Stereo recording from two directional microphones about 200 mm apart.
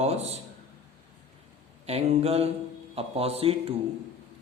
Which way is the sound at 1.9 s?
30° right (ahead or behind).